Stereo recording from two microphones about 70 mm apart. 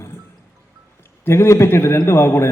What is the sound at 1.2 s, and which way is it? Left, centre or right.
A man's voice, left.